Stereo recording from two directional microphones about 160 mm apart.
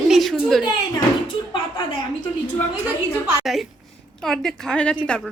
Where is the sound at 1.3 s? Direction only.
30° left (ahead or behind).